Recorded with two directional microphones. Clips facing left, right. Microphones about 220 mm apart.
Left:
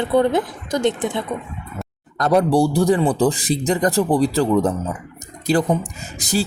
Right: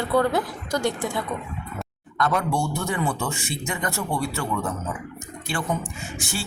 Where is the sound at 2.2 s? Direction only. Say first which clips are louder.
Left 8 dB; 35° left (ahead or behind).